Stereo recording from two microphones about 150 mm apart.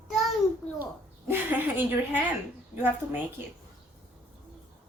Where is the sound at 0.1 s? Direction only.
Centre (ahead or behind).